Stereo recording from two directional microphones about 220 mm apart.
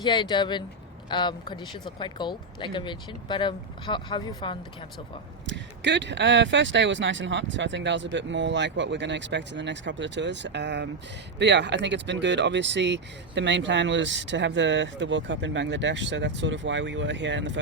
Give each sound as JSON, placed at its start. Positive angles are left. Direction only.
{"t": 0.0, "sound": "speech", "side_deg": 20}
{"t": 5.5, "sound": "speech", "side_deg": -55}